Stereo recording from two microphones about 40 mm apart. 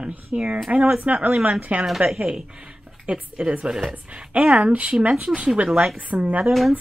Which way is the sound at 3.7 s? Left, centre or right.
Centre.